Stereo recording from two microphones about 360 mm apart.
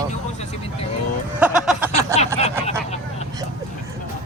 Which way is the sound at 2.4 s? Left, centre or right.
Centre.